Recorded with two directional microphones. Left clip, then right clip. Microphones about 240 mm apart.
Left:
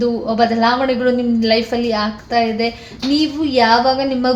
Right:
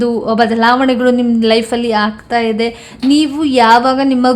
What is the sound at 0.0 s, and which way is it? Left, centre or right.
A woman's voice, right.